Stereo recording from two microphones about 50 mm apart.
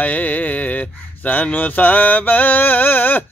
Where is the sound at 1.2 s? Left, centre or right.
Left.